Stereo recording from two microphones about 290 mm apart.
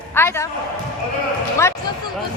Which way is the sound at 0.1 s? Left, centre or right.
Centre.